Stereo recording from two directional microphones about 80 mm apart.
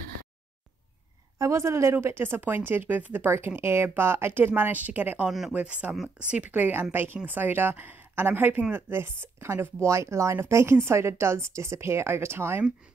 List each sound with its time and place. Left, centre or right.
1.4 s speech: right